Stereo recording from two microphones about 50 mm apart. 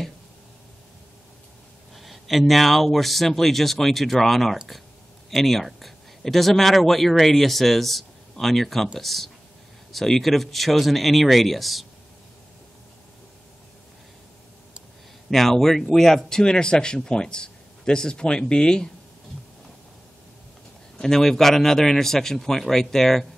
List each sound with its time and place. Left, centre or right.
2.0 s speech: centre
15.2 s speech: centre
21.0 s speech: centre